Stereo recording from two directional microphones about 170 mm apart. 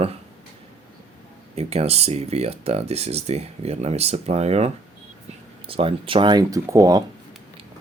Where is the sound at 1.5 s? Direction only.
35° right (ahead or behind); by 7.0 s 20° right (ahead or behind).